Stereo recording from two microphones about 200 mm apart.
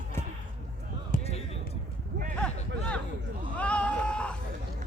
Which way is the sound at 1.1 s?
30° left (ahead or behind).